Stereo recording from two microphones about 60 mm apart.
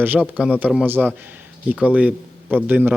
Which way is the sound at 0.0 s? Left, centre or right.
Right.